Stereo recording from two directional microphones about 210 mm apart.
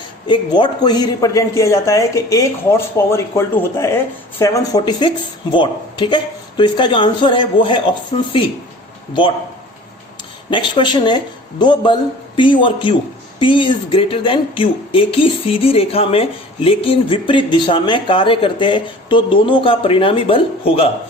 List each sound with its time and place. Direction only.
0.3 s speech: 20° left (ahead or behind)
10.5 s speech: 20° left (ahead or behind)